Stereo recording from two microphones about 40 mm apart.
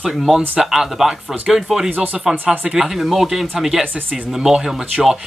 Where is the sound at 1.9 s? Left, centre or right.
Right.